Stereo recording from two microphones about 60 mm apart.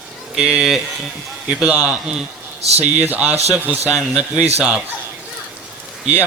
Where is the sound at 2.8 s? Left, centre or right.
Right.